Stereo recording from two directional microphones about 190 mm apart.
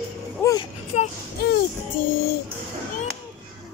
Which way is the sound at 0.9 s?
35° left (ahead or behind).